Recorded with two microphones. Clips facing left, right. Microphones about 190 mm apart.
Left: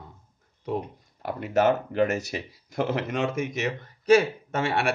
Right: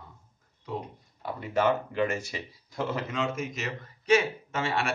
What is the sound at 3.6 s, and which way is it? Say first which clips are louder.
Speech: left 5 dB; 40° left (ahead or behind).